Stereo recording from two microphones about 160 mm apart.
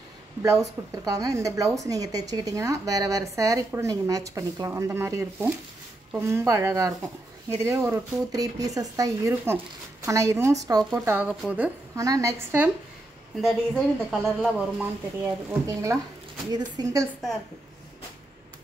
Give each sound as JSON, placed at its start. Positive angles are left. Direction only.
{"t": 0.4, "sound": "a woman's voice", "side_deg": -20}
{"t": 12.0, "sound": "a woman's voice", "side_deg": -20}
{"t": 15.6, "sound": "speech", "side_deg": -20}